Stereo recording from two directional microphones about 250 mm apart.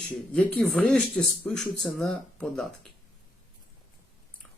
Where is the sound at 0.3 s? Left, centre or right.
Centre.